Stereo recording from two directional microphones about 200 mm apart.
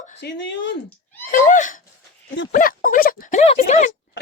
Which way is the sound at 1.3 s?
40° left (ahead or behind).